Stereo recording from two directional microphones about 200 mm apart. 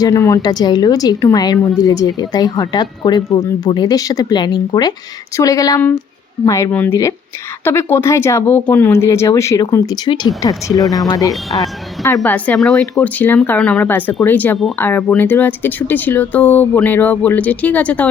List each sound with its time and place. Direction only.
0.0 s speech: 15° left (ahead or behind)
11.3 s speech: centre (ahead or behind)
12.0 s speech: 10° left (ahead or behind)